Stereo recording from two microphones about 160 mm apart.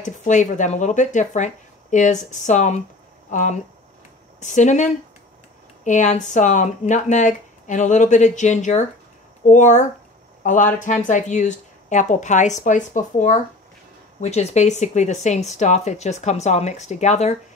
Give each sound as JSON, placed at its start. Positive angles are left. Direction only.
{"t": 0.0, "sound": "speech", "side_deg": 50}